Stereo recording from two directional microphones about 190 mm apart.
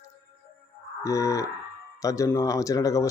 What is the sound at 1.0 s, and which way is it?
Speech, 15° left (ahead or behind).